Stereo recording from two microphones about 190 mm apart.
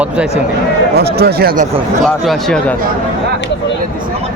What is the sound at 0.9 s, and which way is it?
Speech, 55° right (ahead or behind).